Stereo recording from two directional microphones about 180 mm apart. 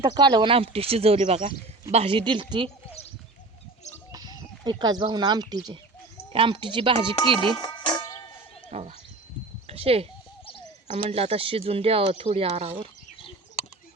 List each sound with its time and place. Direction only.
0.0 s speech: 25° right (ahead or behind)
4.1 s speech: 20° right (ahead or behind)
7.6 s music: 25° left (ahead or behind)
8.7 s a sound: 35° right (ahead or behind)
9.6 s speech: 35° right (ahead or behind)